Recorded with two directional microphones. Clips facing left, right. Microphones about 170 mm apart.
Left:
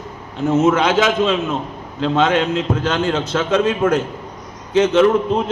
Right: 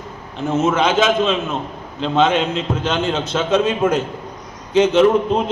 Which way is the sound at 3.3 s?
10° right (ahead or behind).